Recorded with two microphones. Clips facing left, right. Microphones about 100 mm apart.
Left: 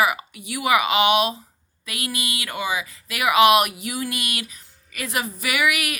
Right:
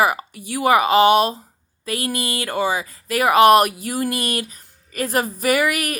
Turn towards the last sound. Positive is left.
turn(degrees=-40)  # may be behind; listen again after turning